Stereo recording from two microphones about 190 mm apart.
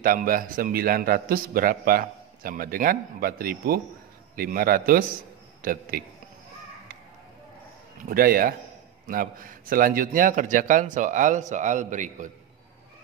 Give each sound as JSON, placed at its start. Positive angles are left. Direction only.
{"t": 0.0, "sound": "a man's voice", "side_deg": -45}
{"t": 8.1, "sound": "a man's voice", "side_deg": -50}